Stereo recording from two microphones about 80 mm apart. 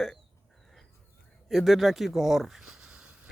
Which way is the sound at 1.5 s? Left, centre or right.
Centre.